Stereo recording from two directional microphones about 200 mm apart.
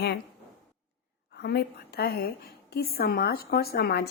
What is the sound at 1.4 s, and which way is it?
A woman's voice, 55° left (ahead or behind).